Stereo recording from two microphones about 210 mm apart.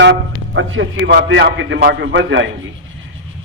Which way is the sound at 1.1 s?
55° right (ahead or behind).